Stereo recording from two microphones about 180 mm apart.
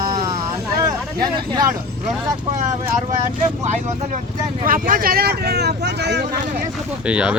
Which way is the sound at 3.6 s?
40° right (ahead or behind).